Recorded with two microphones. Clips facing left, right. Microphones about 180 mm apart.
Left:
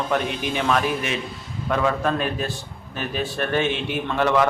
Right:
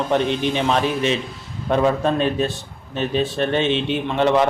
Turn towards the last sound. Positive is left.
turn(degrees=-25)  # may be behind; listen again after turning